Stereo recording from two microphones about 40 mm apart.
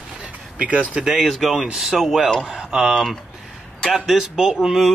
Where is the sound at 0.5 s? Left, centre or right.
Right.